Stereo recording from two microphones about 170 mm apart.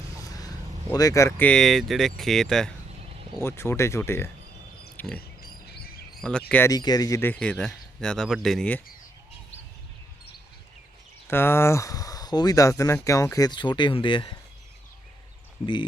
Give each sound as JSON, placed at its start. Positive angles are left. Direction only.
{"t": 0.2, "sound": "vehicle", "side_deg": 20}
{"t": 0.9, "sound": "speech", "side_deg": 20}
{"t": 1.5, "sound": "speech", "side_deg": 5}
{"t": 3.3, "sound": "speech", "side_deg": 15}
{"t": 4.9, "sound": "pig", "side_deg": 10}
{"t": 5.4, "sound": "bird", "side_deg": 65}
{"t": 6.1, "sound": "speech", "side_deg": 5}
{"t": 6.7, "sound": "speech", "side_deg": 25}
{"t": 11.3, "sound": "speech", "side_deg": 15}
{"t": 15.6, "sound": "speech", "side_deg": 30}